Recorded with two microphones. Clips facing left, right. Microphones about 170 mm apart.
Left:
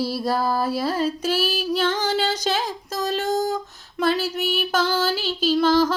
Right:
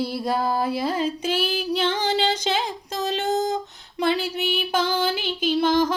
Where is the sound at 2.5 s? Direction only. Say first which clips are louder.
Even; 20° right (ahead or behind).